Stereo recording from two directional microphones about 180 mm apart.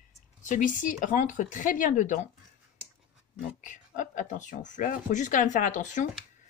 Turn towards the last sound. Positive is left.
turn(degrees=45)  # may be behind; listen again after turning